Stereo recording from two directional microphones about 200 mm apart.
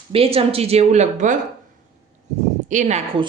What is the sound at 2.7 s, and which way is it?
Speech, 35° right (ahead or behind).